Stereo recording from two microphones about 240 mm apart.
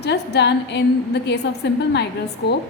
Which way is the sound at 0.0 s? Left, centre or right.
Left.